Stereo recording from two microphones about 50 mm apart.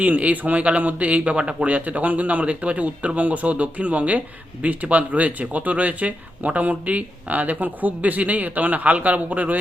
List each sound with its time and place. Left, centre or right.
0.0 s speech: right